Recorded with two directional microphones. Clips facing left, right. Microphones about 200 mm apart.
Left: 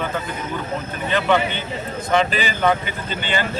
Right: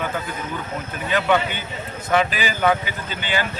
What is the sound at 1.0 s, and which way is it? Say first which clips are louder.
Speech: left 1 dB; 5° right (ahead or behind).